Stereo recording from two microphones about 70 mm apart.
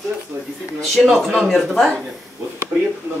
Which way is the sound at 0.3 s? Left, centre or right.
Right.